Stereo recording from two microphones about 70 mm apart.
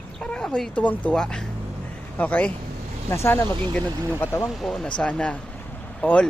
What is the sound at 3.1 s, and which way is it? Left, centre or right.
Speech, left.